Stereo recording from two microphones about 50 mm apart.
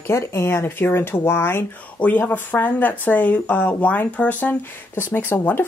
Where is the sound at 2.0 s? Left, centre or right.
Left.